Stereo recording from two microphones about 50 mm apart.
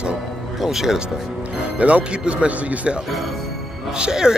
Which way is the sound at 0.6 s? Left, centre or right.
Centre.